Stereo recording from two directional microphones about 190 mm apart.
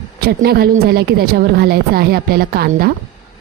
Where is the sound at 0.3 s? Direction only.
55° right (ahead or behind).